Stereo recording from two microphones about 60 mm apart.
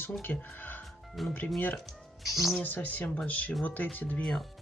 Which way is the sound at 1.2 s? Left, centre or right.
Centre.